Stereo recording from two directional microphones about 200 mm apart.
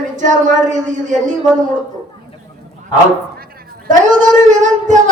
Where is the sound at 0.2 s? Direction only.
40° right (ahead or behind).